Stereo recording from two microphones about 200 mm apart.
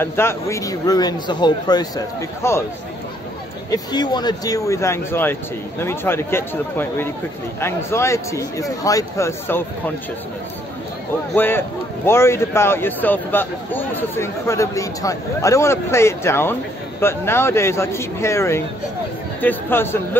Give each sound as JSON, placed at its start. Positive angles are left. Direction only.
{"t": 0.0, "sound": "a man's voice", "side_deg": 10}
{"t": 3.7, "sound": "a man's voice", "side_deg": 20}
{"t": 11.3, "sound": "a man's voice", "side_deg": 10}